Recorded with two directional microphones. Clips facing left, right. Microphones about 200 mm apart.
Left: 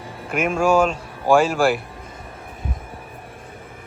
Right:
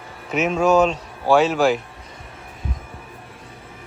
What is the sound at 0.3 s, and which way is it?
A man's voice, 10° left (ahead or behind).